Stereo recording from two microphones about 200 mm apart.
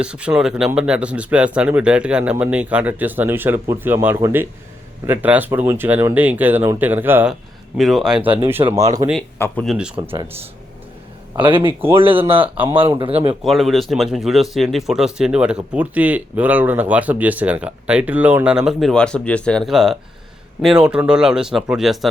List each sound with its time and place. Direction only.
0.0 s speech: 5° right (ahead or behind)
8.6 s speech: 25° right (ahead or behind)
9.4 s speech: 5° left (ahead or behind)
9.7 s speech: 5° right (ahead or behind)
10.0 s speech: 20° right (ahead or behind)
11.3 s speech: 25° right (ahead or behind)
13.4 s speech: centre (ahead or behind)